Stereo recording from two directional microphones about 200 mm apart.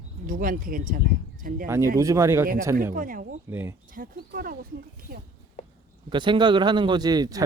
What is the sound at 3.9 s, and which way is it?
Speech, 45° right (ahead or behind).